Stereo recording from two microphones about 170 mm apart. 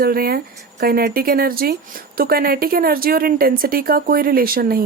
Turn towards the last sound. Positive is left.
turn(degrees=-60)  # may be behind; listen again after turning